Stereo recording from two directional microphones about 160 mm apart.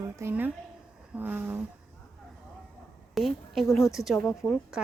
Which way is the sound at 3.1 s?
Centre (ahead or behind).